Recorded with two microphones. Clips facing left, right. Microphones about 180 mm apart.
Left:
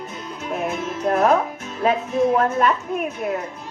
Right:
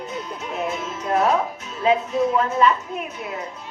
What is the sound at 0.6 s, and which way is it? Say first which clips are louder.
Music: left 5 dB; 50° left (ahead or behind).